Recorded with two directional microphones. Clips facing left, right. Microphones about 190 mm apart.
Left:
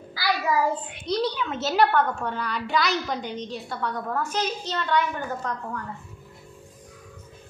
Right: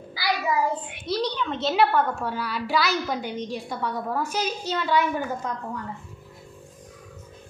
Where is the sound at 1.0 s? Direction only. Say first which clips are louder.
Left 1 dB; centre (ahead or behind).